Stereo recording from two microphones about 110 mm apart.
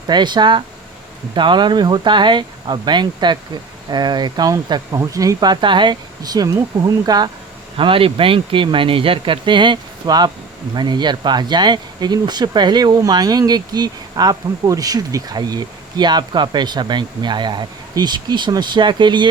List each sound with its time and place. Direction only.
0.1 s speech: 45° right (ahead or behind)
7.8 s speech: 55° right (ahead or behind)